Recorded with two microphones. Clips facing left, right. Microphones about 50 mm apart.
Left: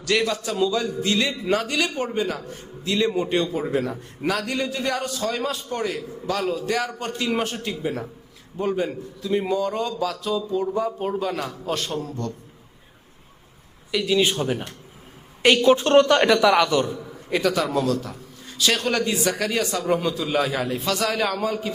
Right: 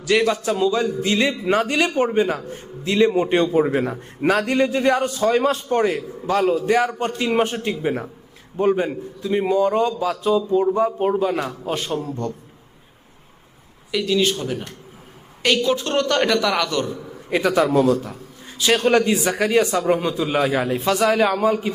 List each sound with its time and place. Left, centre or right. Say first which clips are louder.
0.0 s a man's voice: right 4 dB; centre
13.9 s a man's voice: right 1 dB; centre
15.5 s a woman's voice: left 6 dB; left
16.1 s a man's voice: left 2 dB; centre
17.2 s a man's voice: right 4 dB; centre